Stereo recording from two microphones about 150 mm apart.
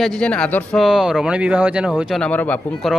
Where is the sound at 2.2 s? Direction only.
10° left (ahead or behind).